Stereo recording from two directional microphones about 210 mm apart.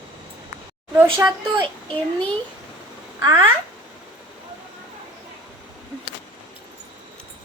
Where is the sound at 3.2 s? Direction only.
15° right (ahead or behind).